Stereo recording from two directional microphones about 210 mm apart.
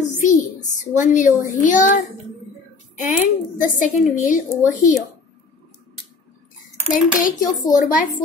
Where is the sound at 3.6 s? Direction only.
40° left (ahead or behind).